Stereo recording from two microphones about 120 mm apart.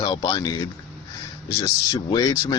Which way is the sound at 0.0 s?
35° left (ahead or behind).